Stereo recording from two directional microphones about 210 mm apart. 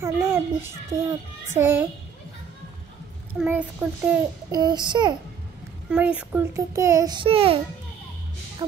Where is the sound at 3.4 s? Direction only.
5° right (ahead or behind).